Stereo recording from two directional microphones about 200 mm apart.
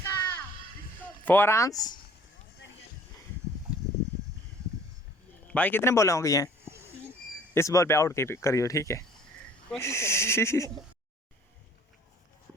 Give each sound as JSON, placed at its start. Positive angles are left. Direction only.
{"t": 0.0, "sound": "music", "side_deg": 15}
{"t": 1.2, "sound": "speech", "side_deg": 10}
{"t": 5.5, "sound": "speech", "side_deg": 5}
{"t": 7.5, "sound": "speech", "side_deg": 15}